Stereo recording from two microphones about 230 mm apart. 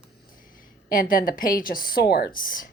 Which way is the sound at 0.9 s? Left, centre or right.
Left.